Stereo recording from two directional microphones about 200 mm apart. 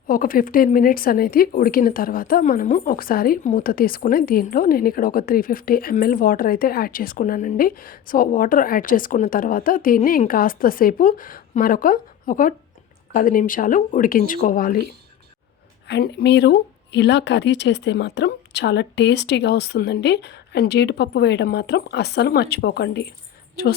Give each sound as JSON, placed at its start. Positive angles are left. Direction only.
{"t": 0.1, "sound": "speech", "side_deg": 45}
{"t": 15.9, "sound": "speech", "side_deg": 55}